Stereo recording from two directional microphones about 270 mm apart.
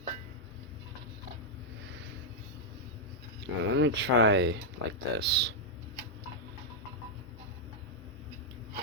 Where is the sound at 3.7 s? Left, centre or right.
Right.